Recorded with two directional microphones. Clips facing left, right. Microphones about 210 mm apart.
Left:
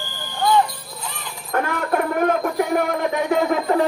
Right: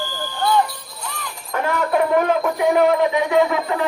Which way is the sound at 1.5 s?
55° left (ahead or behind).